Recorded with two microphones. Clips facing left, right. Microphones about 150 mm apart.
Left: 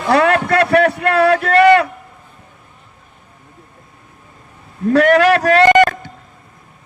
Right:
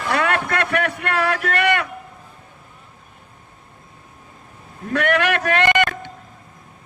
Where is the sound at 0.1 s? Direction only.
30° left (ahead or behind).